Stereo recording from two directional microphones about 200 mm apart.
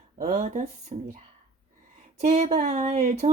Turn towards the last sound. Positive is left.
turn(degrees=-35)  # may be behind; listen again after turning